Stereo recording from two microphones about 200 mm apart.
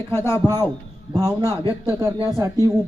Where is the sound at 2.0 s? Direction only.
15° right (ahead or behind).